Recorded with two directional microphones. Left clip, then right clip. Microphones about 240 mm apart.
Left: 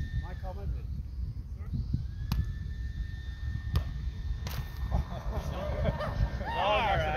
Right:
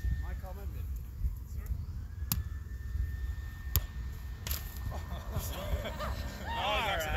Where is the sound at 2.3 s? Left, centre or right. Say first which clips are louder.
Right 1 dB; right.